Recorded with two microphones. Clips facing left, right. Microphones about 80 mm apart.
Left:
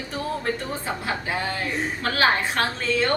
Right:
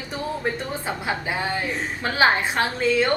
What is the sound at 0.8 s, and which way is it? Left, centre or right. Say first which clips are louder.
A woman's voice: right 1 dB; centre.